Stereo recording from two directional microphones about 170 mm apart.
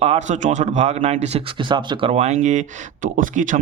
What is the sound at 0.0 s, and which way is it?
Speech, 40° right (ahead or behind).